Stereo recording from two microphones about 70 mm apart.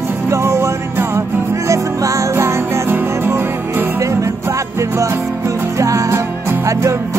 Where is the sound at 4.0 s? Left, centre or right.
Right.